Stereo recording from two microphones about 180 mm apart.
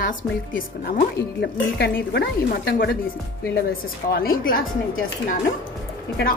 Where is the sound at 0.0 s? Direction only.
50° left (ahead or behind).